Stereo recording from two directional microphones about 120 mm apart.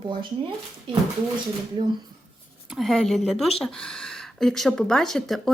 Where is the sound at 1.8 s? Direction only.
40° right (ahead or behind).